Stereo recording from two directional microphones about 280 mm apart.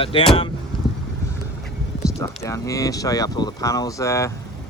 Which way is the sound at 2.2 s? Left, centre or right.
Centre.